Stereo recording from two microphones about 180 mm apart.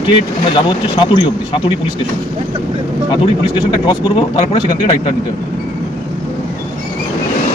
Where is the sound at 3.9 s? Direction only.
25° left (ahead or behind).